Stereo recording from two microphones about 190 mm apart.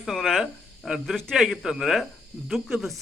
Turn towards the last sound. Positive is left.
turn(degrees=0)  # may be behind; listen again after turning